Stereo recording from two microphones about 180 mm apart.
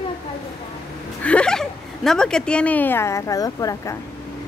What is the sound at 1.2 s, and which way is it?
A woman's voice, 5° left (ahead or behind).